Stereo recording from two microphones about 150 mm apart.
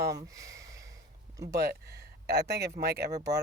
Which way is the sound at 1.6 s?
90° right.